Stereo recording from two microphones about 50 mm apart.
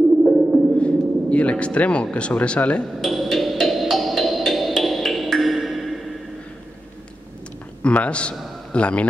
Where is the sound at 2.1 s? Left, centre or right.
Left.